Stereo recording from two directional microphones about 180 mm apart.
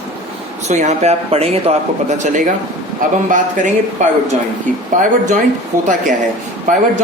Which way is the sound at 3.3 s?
45° right (ahead or behind).